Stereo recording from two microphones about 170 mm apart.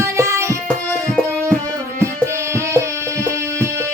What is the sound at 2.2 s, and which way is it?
Music, 15° right (ahead or behind).